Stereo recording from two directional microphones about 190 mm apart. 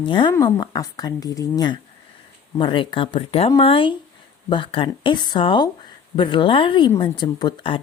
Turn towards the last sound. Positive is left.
turn(degrees=25)  # may be behind; listen again after turning